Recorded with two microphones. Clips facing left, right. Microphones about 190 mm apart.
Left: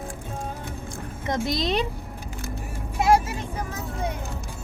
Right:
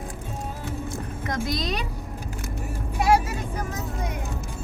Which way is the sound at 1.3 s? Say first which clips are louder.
Left 3 dB; 25° left (ahead or behind).